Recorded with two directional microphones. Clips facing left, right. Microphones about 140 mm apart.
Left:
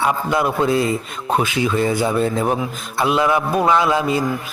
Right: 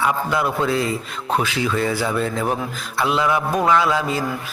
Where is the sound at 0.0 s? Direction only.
20° left (ahead or behind).